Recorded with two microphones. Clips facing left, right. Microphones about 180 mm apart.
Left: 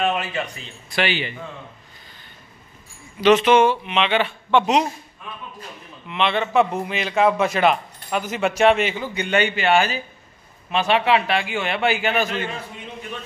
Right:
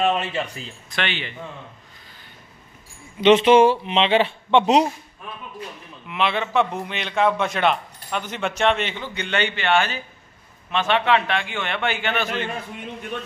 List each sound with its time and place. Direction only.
0.0 s speech: 30° right (ahead or behind)
0.8 s a man's voice: 5° left (ahead or behind)
3.2 s speech: 25° right (ahead or behind)
6.0 s a man's voice: 5° right (ahead or behind)